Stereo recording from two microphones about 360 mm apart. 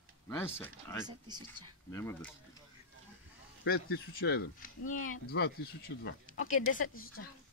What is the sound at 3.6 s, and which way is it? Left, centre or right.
A woman's voice, left.